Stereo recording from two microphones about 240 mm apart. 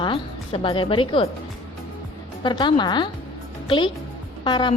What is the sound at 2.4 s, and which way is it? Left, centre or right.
A woman's voice, centre.